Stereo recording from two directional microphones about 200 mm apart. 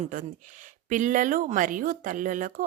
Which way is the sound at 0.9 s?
40° right (ahead or behind).